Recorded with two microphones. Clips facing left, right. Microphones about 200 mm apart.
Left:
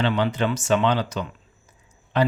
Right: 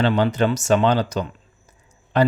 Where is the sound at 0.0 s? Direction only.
40° right (ahead or behind).